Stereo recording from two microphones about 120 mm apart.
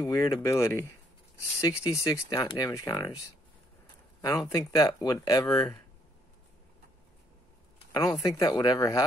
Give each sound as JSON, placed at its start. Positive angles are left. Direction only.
{"t": 0.0, "sound": "speech", "side_deg": 25}
{"t": 4.2, "sound": "speech", "side_deg": 30}
{"t": 7.9, "sound": "speech", "side_deg": 30}